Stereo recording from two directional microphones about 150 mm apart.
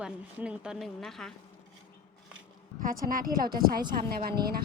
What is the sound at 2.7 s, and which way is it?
A woman's voice, 70° right (ahead or behind).